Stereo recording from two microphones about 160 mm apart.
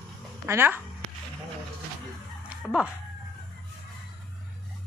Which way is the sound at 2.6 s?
5° right (ahead or behind).